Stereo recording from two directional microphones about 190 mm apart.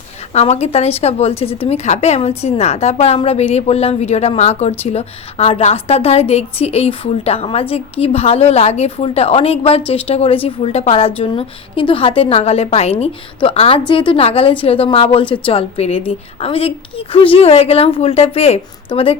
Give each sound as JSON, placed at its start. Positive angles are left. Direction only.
{"t": 0.3, "sound": "a woman's voice", "side_deg": 35}